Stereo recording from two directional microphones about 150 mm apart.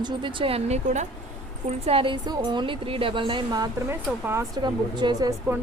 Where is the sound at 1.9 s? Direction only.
40° right (ahead or behind).